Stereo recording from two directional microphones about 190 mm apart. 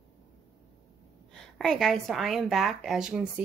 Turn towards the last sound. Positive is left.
turn(degrees=-5)  # may be behind; listen again after turning